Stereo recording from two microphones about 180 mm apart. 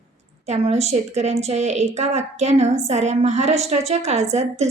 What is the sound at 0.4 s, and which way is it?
A woman's voice, 35° right (ahead or behind).